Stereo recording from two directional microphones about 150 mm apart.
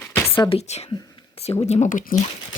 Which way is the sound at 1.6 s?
50° left (ahead or behind).